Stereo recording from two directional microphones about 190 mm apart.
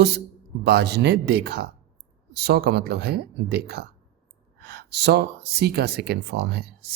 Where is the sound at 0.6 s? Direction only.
60° right (ahead or behind).